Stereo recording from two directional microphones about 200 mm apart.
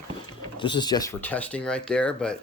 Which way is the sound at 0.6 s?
20° left (ahead or behind).